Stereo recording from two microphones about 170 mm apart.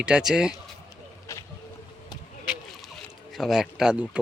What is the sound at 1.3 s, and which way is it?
Vehicle, 15° left (ahead or behind).